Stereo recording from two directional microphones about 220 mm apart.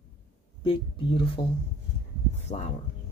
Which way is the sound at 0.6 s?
25° left (ahead or behind).